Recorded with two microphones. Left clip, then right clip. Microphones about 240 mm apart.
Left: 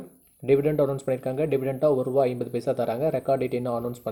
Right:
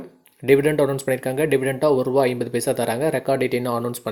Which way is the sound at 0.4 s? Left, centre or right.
Centre.